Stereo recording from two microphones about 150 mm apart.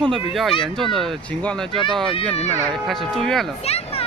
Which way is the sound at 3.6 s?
45° left (ahead or behind).